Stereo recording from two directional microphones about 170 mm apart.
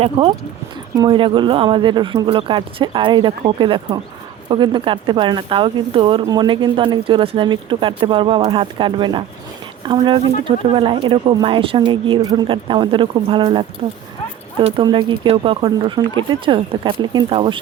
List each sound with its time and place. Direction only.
0.2 s speech: 30° right (ahead or behind)